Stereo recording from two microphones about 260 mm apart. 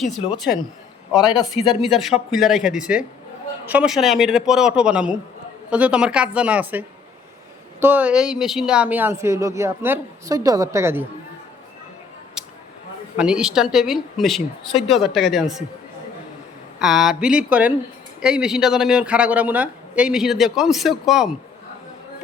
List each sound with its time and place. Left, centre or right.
1.8 s speech: centre
13.1 s speech: centre
16.8 s speech: centre